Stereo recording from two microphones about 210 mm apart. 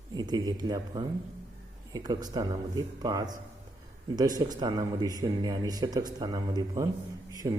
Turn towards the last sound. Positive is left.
turn(degrees=-15)  # may be behind; listen again after turning